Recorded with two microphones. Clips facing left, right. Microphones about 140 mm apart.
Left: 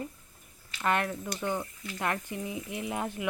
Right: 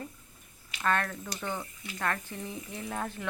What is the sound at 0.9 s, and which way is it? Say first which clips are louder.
Speech: left 1 dB; 15° left (ahead or behind).